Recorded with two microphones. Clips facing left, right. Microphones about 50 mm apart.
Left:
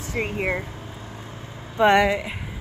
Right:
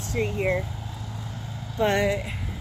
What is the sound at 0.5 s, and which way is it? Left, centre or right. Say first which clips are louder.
Vehicle: right 1 dB; left.